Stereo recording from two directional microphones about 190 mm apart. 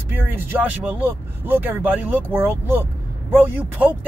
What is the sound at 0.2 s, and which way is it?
Speech, 10° right (ahead or behind).